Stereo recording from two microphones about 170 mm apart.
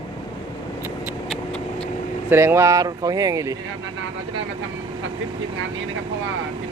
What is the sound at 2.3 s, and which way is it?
Speech, 15° right (ahead or behind).